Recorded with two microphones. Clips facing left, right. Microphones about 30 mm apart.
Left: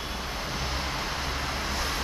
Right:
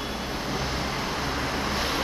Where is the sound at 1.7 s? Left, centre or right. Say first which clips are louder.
Right 4 dB; centre.